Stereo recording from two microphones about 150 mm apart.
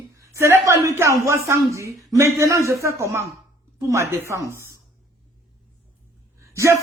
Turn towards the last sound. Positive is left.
turn(degrees=-20)  # may be behind; listen again after turning